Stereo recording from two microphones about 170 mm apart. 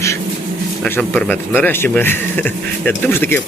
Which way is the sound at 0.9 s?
10° left (ahead or behind).